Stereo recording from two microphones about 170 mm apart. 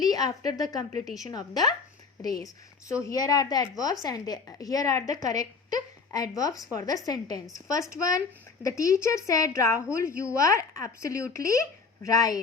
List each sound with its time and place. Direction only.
0.3 s a woman's voice: 20° left (ahead or behind)